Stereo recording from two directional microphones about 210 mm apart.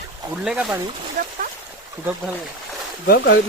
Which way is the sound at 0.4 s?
5° right (ahead or behind).